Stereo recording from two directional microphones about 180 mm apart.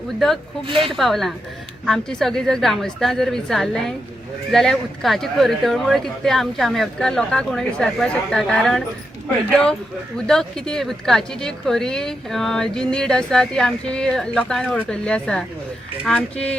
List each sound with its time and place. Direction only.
0.7 s speech: 30° right (ahead or behind)
0.9 s speech: centre (ahead or behind)
10.2 s speech: 5° left (ahead or behind)